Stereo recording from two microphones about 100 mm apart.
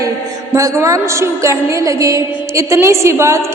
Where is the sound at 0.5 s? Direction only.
30° right (ahead or behind).